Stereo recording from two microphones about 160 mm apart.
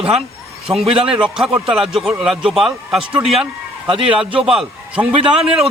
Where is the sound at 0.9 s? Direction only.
35° right (ahead or behind).